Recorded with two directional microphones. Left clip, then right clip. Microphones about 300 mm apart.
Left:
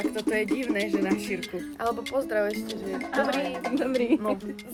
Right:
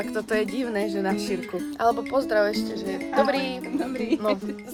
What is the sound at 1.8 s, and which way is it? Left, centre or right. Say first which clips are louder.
Speech: right 5 dB; right.